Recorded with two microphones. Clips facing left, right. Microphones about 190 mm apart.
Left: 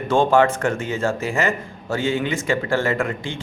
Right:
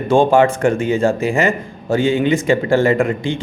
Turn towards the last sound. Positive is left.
turn(degrees=-15)  # may be behind; listen again after turning